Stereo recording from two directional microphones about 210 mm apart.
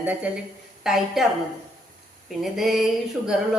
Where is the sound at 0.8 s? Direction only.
Centre (ahead or behind).